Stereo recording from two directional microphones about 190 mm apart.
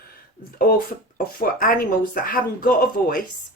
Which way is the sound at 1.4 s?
45° left (ahead or behind).